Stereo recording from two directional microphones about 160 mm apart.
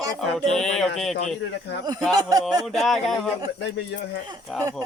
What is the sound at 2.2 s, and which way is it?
Speech, 25° right (ahead or behind).